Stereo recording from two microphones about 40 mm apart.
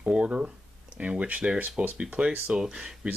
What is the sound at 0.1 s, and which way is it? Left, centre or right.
Speech, right.